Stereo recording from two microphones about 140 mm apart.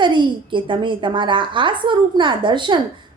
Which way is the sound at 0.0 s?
35° right (ahead or behind).